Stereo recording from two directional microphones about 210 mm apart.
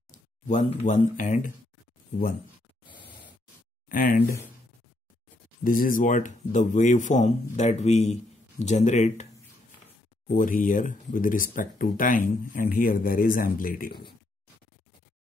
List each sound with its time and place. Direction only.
0.1 s speech: 40° left (ahead or behind)
3.9 s speech: 40° left (ahead or behind)
5.6 s speech: 40° left (ahead or behind)